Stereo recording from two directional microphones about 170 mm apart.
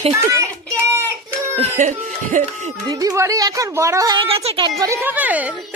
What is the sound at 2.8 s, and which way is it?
A woman's voice, 20° right (ahead or behind).